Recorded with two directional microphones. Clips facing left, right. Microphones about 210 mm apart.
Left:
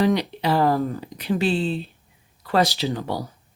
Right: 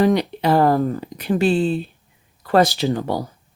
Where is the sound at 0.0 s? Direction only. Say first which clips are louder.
Right 4 dB; 50° right (ahead or behind).